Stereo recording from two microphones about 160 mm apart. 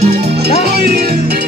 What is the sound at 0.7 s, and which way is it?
Music, 75° right (ahead or behind).